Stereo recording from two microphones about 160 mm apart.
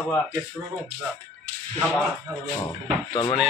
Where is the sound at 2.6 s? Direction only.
25° left (ahead or behind).